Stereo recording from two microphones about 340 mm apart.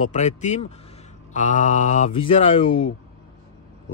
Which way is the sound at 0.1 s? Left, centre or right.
Left.